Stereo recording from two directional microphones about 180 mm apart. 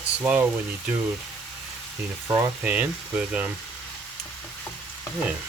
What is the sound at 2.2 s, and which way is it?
Speech, 10° right (ahead or behind).